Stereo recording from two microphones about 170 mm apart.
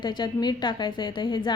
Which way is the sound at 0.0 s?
25° left (ahead or behind).